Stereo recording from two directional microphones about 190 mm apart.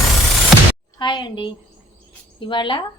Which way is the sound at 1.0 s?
25° left (ahead or behind).